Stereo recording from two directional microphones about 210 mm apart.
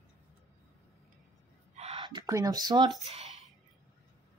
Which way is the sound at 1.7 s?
30° right (ahead or behind).